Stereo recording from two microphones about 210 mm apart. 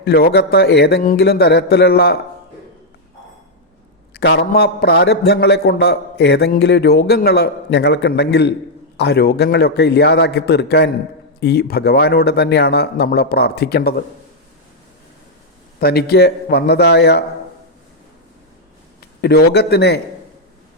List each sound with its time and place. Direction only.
0.0 s a man's voice: 50° left (ahead or behind)
4.1 s a man's voice: 50° left (ahead or behind)
15.8 s a man's voice: 50° left (ahead or behind)
18.9 s speech: 50° left (ahead or behind)